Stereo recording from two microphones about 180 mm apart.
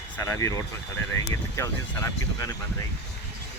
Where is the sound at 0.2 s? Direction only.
15° left (ahead or behind).